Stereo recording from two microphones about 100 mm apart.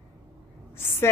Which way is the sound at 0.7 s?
25° left (ahead or behind).